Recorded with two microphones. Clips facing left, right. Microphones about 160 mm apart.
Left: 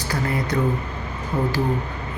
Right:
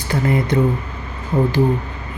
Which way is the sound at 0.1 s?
25° right (ahead or behind).